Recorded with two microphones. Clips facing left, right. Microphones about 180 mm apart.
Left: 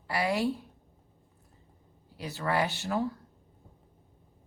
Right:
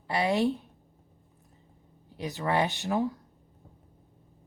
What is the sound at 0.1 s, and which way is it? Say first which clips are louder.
Speech: right 3 dB; 25° right (ahead or behind).